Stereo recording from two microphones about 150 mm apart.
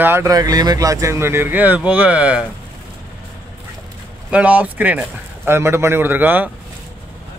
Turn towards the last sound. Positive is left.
turn(degrees=-10)  # may be behind; listen again after turning